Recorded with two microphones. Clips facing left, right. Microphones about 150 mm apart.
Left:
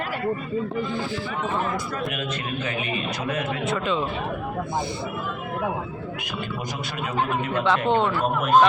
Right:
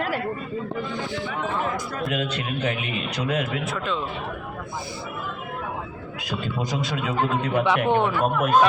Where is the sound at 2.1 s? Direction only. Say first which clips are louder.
Right 2 dB; 75° right (ahead or behind).